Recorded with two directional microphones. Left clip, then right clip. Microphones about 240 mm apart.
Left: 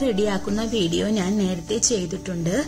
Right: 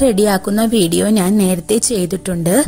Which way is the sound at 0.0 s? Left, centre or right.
Right.